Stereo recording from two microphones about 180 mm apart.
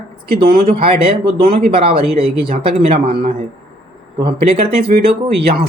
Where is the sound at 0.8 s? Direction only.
30° right (ahead or behind).